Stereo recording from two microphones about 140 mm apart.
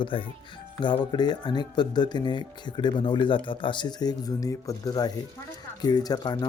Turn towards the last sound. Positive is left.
turn(degrees=30)  # may be behind; listen again after turning